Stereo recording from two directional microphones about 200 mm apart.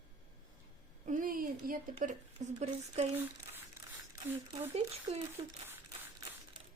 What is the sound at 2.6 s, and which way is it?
Speech, 35° right (ahead or behind).